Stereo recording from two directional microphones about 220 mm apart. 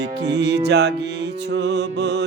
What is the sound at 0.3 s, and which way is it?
Music, 50° right (ahead or behind).